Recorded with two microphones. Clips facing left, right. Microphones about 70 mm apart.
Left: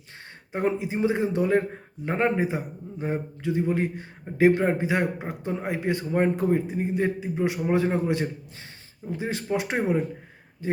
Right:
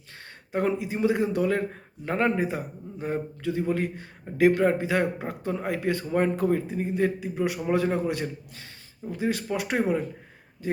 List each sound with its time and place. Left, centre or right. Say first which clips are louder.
0.5 s a man's voice: even; left